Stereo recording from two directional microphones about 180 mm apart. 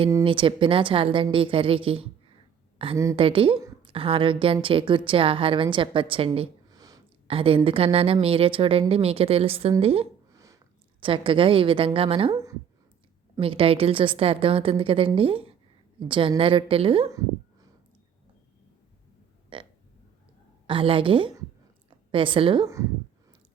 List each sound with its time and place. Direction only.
0.3 s a woman's voice: 30° right (ahead or behind)
6.7 s a sound: 20° right (ahead or behind)
7.3 s a woman's voice: 30° right (ahead or behind)
10.3 s a sound: 20° right (ahead or behind)
11.0 s a woman's voice: 30° right (ahead or behind)
13.4 s a woman's voice: 30° right (ahead or behind)
19.5 s burping: 30° right (ahead or behind)
20.7 s a woman's voice: 30° right (ahead or behind)